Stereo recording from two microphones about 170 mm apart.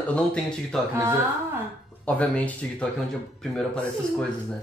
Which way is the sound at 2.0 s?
5° left (ahead or behind).